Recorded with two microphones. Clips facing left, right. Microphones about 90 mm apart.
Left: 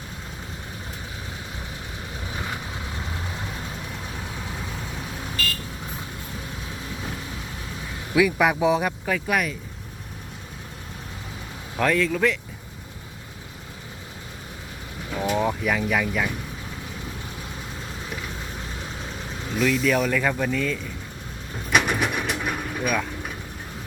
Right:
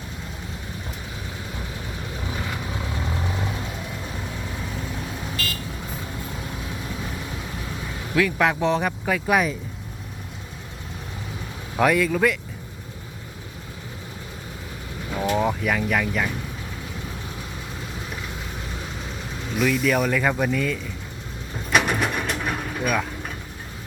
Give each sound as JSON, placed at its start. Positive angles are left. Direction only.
{"t": 8.1, "sound": "speech", "side_deg": 10}
{"t": 9.2, "sound": "speech", "side_deg": -20}
{"t": 11.8, "sound": "speech", "side_deg": -10}
{"t": 15.1, "sound": "vehicle", "side_deg": -5}
{"t": 19.5, "sound": "speech", "side_deg": 0}
{"t": 21.7, "sound": "mechanisms", "side_deg": 0}